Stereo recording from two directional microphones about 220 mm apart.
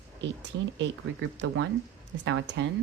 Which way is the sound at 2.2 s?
55° right (ahead or behind).